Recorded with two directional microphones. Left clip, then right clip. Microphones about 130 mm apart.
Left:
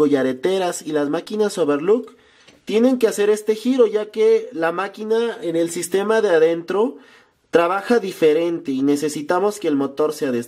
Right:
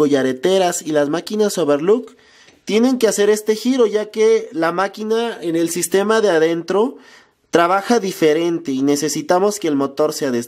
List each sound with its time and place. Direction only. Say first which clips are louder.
0.0 s speech: right 2 dB; 20° right (ahead or behind)